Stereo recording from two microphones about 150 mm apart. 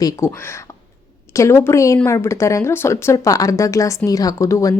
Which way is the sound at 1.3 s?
20° left (ahead or behind).